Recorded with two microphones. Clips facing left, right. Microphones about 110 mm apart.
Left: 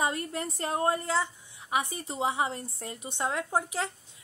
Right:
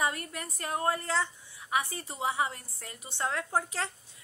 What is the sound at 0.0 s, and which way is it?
A woman's voice, 25° left (ahead or behind).